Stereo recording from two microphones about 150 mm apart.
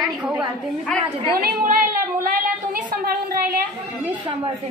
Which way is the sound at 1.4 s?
65° right (ahead or behind).